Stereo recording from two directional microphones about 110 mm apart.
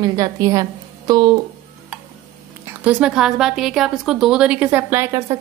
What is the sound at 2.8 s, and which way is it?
A woman's voice, 10° right (ahead or behind).